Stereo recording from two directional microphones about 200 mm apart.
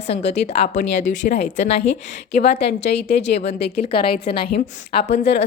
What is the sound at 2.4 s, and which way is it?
Speech, 55° left (ahead or behind).